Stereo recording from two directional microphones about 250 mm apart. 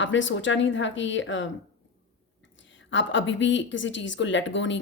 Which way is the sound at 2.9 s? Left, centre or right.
Left.